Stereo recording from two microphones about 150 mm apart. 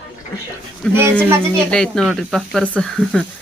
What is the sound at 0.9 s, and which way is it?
Speech, 15° right (ahead or behind).